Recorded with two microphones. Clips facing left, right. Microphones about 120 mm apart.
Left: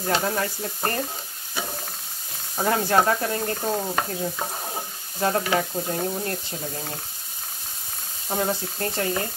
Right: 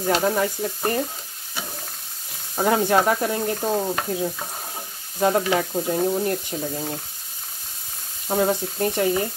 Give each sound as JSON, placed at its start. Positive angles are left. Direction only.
{"t": 0.0, "sound": "stir", "side_deg": -10}
{"t": 2.5, "sound": "stir", "side_deg": -15}
{"t": 8.3, "sound": "stir", "side_deg": -15}